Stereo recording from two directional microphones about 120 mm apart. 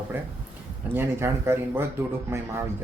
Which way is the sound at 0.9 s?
20° right (ahead or behind).